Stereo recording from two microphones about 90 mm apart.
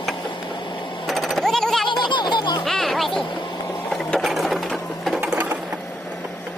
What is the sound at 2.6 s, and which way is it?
Music, centre (ahead or behind).